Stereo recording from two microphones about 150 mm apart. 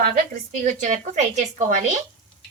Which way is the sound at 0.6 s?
55° right (ahead or behind).